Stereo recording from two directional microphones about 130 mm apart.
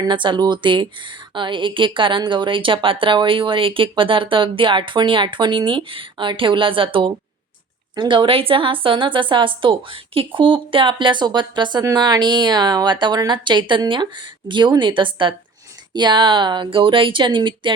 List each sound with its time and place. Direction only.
0.0 s a woman's voice: 35° right (ahead or behind)